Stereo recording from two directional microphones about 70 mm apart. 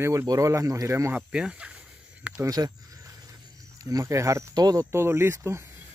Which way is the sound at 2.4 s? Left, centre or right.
Right.